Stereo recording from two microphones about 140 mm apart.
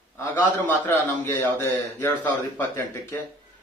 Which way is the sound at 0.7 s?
15° left (ahead or behind).